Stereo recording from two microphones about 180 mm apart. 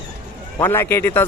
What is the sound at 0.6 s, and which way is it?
Speech, 10° left (ahead or behind).